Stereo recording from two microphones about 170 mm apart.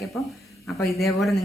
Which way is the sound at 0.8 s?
Centre (ahead or behind).